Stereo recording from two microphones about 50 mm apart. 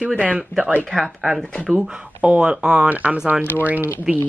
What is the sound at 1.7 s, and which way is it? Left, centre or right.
Speech, centre.